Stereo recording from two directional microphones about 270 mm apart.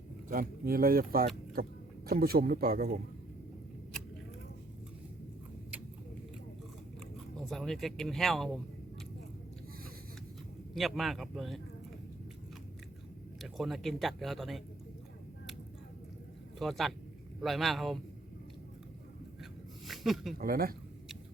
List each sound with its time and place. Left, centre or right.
0.3 s speech: right
3.9 s a sound: centre
7.3 s speech: centre
10.8 s speech: centre
13.4 s speech: centre
16.6 s speech: centre
19.9 s a sound: centre
20.4 s speech: right